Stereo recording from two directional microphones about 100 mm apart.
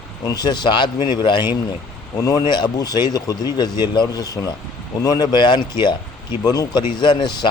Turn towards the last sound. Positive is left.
turn(degrees=45)  # may be behind; listen again after turning